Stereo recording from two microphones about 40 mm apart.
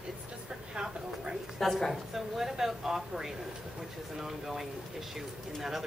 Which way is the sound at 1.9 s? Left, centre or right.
Centre.